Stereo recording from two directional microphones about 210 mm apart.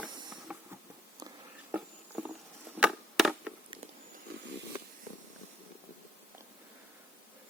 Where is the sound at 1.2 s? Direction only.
20° right (ahead or behind).